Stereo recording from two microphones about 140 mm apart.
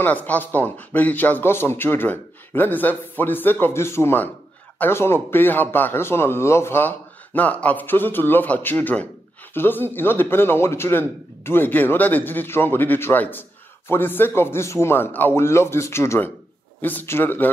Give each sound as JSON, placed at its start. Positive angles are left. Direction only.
{"t": 0.0, "sound": "a man's voice", "side_deg": 10}